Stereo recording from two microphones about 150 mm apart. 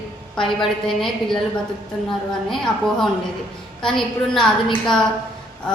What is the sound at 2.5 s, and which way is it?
A woman's voice, centre (ahead or behind).